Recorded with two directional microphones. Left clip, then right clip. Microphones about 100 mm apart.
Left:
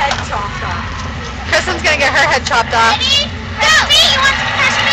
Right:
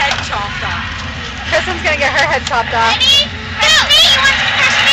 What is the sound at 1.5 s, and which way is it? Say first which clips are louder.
Vehicle: left 1 dB; 20° left (ahead or behind).